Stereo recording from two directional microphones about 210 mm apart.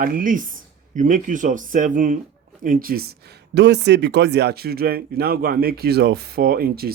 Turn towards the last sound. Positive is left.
turn(degrees=-45)  # may be behind; listen again after turning